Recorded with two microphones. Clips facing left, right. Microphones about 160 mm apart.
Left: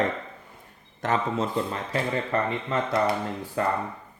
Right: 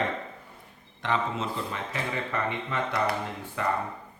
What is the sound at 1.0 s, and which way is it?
Speech, 40° left (ahead or behind).